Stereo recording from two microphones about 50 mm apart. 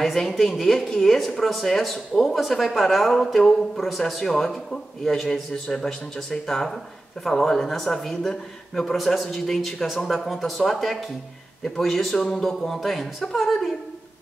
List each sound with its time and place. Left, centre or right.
0.0 s speech: centre
8.9 s speech: centre